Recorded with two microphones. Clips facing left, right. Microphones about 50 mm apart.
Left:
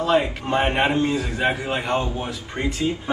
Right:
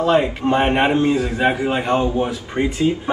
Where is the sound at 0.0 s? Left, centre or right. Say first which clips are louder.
Right 4 dB; centre.